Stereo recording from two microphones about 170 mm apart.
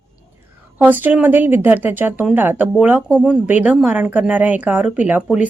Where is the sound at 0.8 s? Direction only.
10° right (ahead or behind).